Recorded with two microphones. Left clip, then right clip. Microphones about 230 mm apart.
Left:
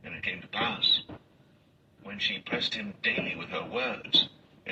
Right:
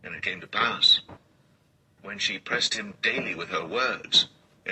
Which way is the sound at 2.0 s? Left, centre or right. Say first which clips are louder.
Right 2 dB; right.